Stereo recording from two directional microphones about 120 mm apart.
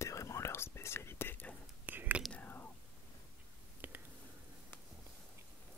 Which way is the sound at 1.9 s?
15° right (ahead or behind).